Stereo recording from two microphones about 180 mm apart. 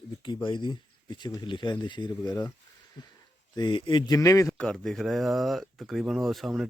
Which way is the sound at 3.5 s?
25° left (ahead or behind).